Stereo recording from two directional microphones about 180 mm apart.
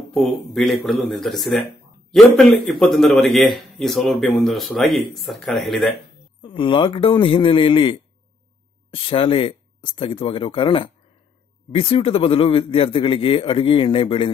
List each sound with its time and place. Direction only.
0.1 s a man's voice: centre (ahead or behind)
6.4 s a man's voice: 25° left (ahead or behind)